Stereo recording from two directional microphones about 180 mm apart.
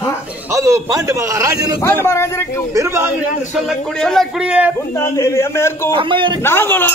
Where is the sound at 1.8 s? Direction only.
15° left (ahead or behind).